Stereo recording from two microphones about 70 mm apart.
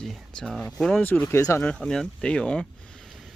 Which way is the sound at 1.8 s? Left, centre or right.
Centre.